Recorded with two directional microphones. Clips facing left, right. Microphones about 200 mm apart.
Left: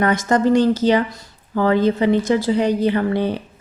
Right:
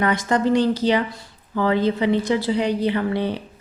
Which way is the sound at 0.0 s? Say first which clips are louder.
Left 3 dB; 45° left (ahead or behind).